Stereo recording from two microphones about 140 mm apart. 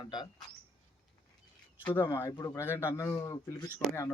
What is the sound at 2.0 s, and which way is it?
A man's voice, 25° left (ahead or behind).